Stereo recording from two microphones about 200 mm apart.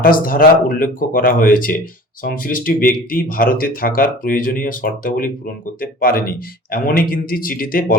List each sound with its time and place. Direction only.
0.0 s speech: 45° left (ahead or behind)